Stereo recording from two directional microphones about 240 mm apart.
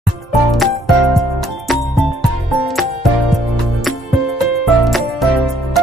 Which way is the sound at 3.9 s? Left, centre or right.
Centre.